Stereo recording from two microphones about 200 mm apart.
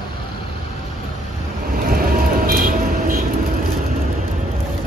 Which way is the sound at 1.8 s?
45° right (ahead or behind).